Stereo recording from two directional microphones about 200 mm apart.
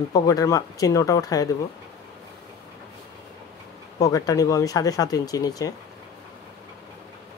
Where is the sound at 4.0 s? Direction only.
15° left (ahead or behind).